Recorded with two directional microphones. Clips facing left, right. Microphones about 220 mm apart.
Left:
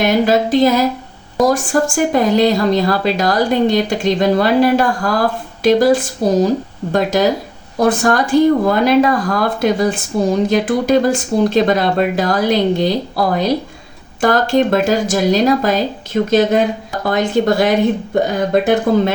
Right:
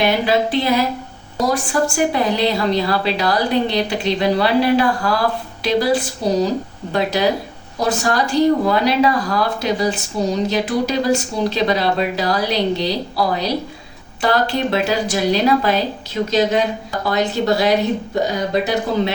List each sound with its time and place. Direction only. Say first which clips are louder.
0.0 s speech: left 3 dB; 45° left (ahead or behind)